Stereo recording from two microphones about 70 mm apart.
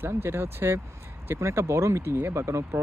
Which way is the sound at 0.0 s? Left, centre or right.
Right.